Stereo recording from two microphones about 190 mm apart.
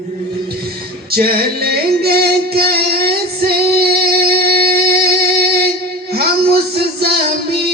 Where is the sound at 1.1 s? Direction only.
50° right (ahead or behind).